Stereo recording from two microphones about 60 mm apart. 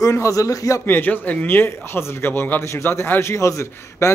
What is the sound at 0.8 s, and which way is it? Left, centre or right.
Speech, left.